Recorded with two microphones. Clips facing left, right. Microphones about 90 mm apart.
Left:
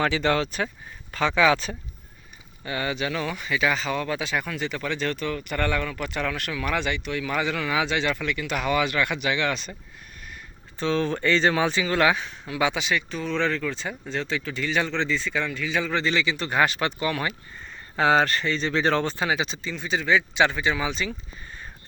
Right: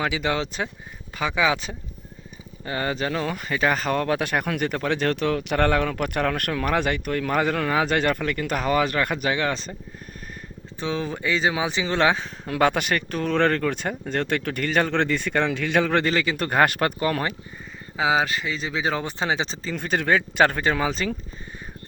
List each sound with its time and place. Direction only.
0.0 s speech: 10° right (ahead or behind)
2.6 s speech: 40° right (ahead or behind)
10.8 s speech: 15° right (ahead or behind)
11.8 s speech: 30° right (ahead or behind)
12.5 s speech: 55° right (ahead or behind)
17.9 s speech: 5° right (ahead or behind)
19.2 s speech: 30° right (ahead or behind)
19.7 s speech: 55° right (ahead or behind)